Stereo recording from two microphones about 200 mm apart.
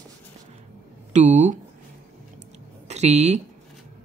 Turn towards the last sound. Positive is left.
turn(degrees=-35)  # may be behind; listen again after turning